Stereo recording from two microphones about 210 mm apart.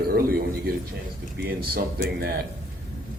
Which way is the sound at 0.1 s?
45° right (ahead or behind).